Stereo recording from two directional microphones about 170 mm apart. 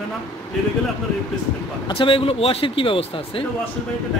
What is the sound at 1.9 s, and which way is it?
Speech, 30° left (ahead or behind).